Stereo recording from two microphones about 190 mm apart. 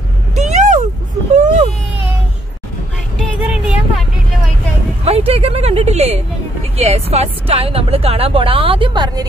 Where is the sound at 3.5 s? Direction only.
5° right (ahead or behind).